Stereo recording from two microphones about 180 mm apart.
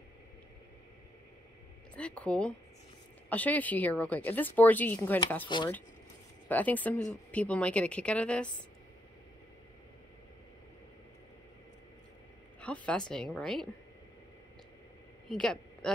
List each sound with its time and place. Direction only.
2.0 s a woman's voice: 5° left (ahead or behind)
5.5 s speech: 25° left (ahead or behind)
6.5 s a woman's voice: 10° left (ahead or behind)
12.5 s a sound: 5° left (ahead or behind)
13.1 s a woman's voice: 5° left (ahead or behind)
15.2 s a man's voice: 5° left (ahead or behind)